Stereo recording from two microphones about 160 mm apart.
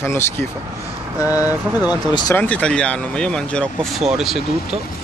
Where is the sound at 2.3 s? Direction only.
10° left (ahead or behind).